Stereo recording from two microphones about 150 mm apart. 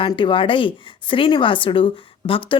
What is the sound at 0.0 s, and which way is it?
A woman's voice, 35° left (ahead or behind).